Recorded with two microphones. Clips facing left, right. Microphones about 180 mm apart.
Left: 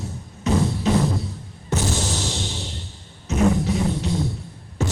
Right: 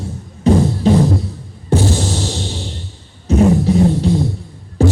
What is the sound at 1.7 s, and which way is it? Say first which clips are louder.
Music: right 9 dB; 30° right (ahead or behind).